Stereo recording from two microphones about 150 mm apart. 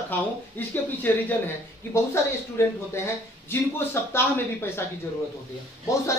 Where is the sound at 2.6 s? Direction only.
15° left (ahead or behind).